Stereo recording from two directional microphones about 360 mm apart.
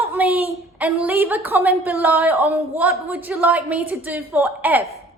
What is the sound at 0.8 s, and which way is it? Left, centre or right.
A woman's voice, centre.